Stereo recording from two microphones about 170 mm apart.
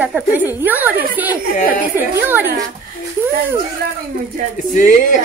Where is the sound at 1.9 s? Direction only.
10° right (ahead or behind).